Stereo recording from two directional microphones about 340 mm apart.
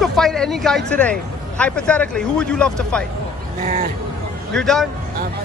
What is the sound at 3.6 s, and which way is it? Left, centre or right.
Speech, right.